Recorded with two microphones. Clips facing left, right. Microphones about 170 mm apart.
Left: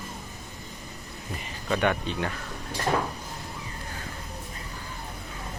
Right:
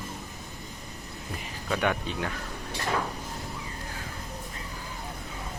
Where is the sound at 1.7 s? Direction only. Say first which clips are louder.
Left 2 dB; 5° right (ahead or behind).